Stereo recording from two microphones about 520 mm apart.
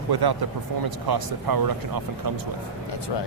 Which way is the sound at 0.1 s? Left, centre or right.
Right.